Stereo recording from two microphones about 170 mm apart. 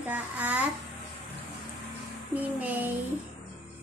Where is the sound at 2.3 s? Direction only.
10° right (ahead or behind).